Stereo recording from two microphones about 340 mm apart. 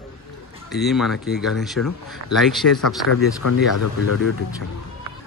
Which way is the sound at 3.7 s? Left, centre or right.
Left.